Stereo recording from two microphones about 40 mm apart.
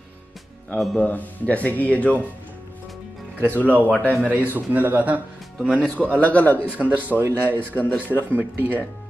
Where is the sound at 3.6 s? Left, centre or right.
Right.